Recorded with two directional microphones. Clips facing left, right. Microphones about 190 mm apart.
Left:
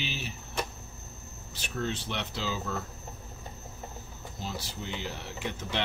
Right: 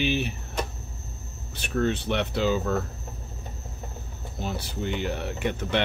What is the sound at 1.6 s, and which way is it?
Speech, 60° right (ahead or behind).